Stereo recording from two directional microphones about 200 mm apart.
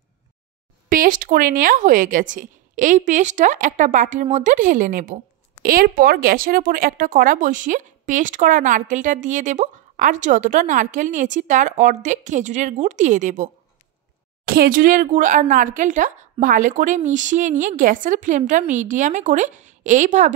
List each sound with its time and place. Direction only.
0.8 s speech: 45° right (ahead or behind)